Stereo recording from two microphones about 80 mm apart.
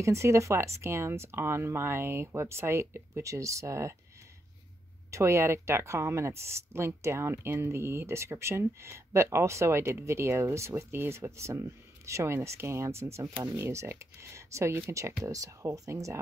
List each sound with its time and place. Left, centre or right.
0.0 s speech: right
5.1 s speech: right